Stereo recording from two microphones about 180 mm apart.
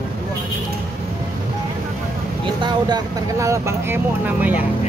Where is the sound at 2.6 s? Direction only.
25° right (ahead or behind).